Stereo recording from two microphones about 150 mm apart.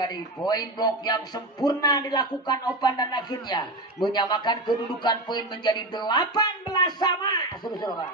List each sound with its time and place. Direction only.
0.0 s a man's voice: 30° left (ahead or behind)